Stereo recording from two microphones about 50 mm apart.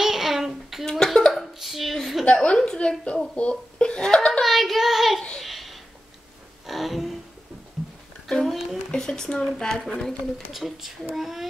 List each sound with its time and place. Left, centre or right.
0.0 s child singing: centre
0.8 s hiccup: centre
1.6 s a sound: centre
2.2 s speech: left
4.3 s speech: centre
5.4 s a sound: centre
6.6 s music: centre
8.3 s a woman's voice: centre
10.5 s a child's voice: centre